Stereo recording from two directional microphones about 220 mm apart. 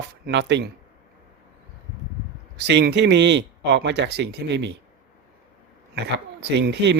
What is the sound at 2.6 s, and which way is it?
Speech, 50° right (ahead or behind).